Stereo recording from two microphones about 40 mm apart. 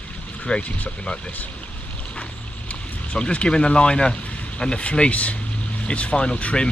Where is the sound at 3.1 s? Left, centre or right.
Left.